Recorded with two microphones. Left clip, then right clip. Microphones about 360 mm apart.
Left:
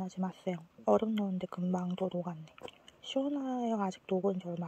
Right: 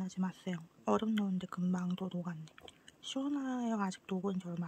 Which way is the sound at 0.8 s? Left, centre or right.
Centre.